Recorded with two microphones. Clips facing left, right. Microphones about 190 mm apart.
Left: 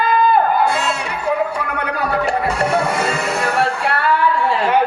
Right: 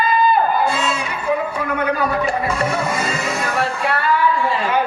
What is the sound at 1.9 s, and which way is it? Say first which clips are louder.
Music: left 1 dB; 70° left (ahead or behind).